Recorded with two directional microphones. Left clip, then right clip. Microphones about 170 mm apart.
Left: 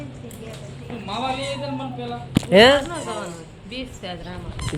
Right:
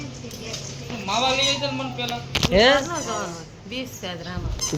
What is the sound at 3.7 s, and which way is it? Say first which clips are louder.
Speech: right 1 dB; 50° right (ahead or behind).